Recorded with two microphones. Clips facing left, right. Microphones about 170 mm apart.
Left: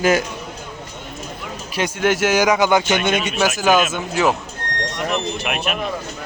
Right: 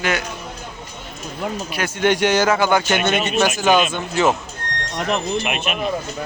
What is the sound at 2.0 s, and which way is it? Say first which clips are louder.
Speech: right 1 dB; 5° left (ahead or behind).